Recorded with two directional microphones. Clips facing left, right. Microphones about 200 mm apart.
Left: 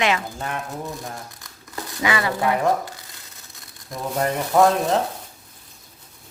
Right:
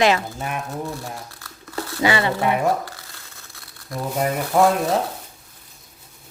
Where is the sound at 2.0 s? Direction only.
30° right (ahead or behind).